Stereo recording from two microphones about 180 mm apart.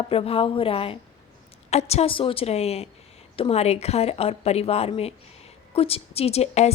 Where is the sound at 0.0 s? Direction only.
30° left (ahead or behind).